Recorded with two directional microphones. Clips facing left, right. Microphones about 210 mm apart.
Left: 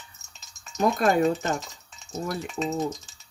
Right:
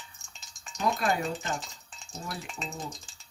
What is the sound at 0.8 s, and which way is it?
Speech, 45° left (ahead or behind).